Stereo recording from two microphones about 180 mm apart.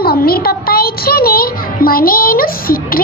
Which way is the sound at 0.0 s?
60° left (ahead or behind).